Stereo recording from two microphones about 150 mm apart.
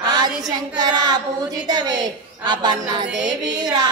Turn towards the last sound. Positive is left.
turn(degrees=-25)  # may be behind; listen again after turning